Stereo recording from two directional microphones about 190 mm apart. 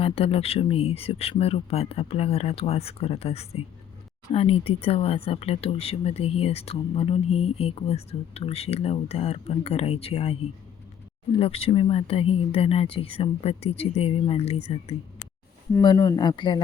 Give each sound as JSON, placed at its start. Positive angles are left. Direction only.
{"t": 0.0, "sound": "speech", "side_deg": 30}
{"t": 15.8, "sound": "speech", "side_deg": 20}